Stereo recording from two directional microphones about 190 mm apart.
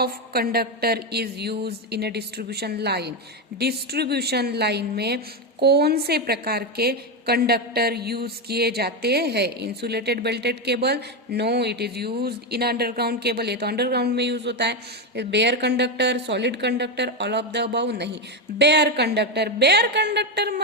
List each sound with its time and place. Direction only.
0.0 s a woman's voice: 55° right (ahead or behind)